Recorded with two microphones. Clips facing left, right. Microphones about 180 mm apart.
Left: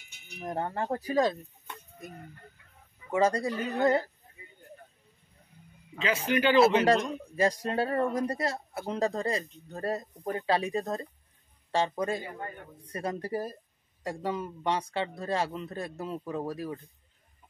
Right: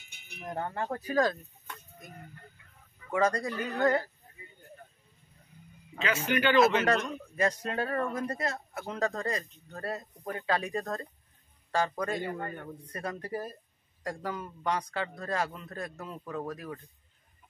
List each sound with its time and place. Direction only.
0.4 s a man's voice: 25° left (ahead or behind)
3.1 s a man's voice: 25° left (ahead or behind)
6.2 s a man's voice: 30° left (ahead or behind)